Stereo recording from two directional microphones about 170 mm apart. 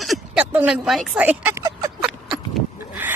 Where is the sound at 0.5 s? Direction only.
5° right (ahead or behind).